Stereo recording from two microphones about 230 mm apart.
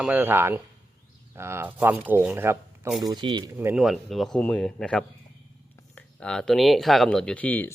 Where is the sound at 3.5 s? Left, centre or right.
Centre.